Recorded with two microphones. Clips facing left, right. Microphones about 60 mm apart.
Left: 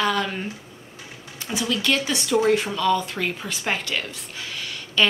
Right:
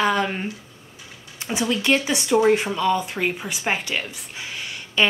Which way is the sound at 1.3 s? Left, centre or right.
Right.